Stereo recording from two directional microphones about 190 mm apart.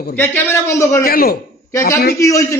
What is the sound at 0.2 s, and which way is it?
Speech, 10° left (ahead or behind).